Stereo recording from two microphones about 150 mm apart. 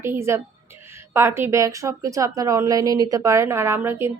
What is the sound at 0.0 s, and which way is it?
A woman's voice, 15° right (ahead or behind).